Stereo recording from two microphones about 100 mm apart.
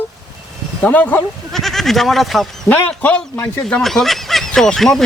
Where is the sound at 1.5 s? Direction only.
Centre (ahead or behind).